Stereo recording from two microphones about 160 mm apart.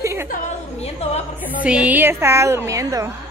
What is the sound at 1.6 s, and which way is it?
A woman's voice, 10° right (ahead or behind).